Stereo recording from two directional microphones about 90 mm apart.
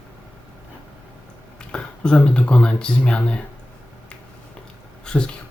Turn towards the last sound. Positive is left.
turn(degrees=10)  # may be behind; listen again after turning